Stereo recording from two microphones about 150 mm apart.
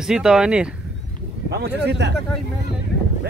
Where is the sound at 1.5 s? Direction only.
90° right.